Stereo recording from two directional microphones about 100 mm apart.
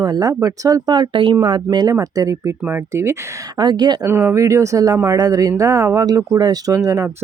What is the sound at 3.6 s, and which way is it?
Speech, 45° right (ahead or behind).